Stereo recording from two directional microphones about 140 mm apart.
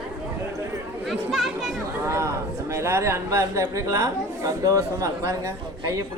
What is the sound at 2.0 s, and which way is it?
A woman's voice, 20° right (ahead or behind).